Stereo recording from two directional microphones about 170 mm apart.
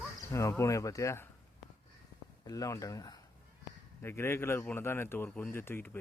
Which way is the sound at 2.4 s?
20° left (ahead or behind).